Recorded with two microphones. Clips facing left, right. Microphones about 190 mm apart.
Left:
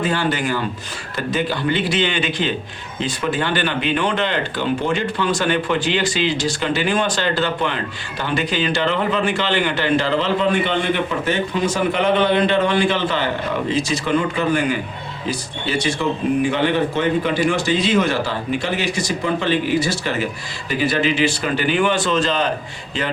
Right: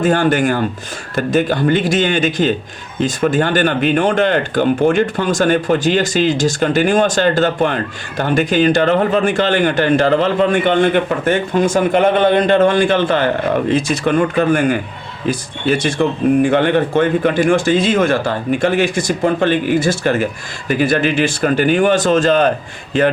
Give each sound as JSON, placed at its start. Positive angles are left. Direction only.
{"t": 0.0, "sound": "a man's voice", "side_deg": -50}